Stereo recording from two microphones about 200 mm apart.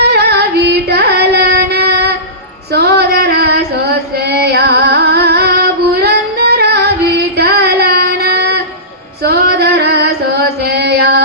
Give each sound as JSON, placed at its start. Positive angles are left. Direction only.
{"t": 0.0, "sound": "carnatic music", "side_deg": -55}
{"t": 2.7, "sound": "female singing", "side_deg": -55}
{"t": 10.6, "sound": "a sound", "side_deg": -55}